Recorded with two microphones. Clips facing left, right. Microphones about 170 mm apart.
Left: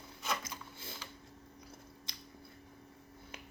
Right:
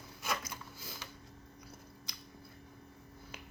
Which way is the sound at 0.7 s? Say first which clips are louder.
Even; 25° left (ahead or behind).